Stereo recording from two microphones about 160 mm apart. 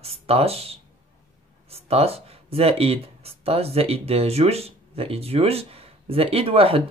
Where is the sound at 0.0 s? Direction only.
40° right (ahead or behind).